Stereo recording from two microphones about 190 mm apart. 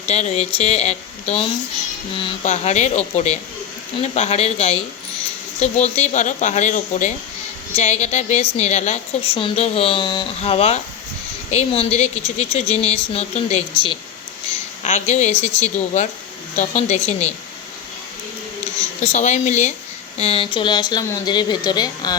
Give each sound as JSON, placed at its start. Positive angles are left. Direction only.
{"t": 0.1, "sound": "a woman's voice", "side_deg": 35}
{"t": 19.0, "sound": "a woman's voice", "side_deg": 35}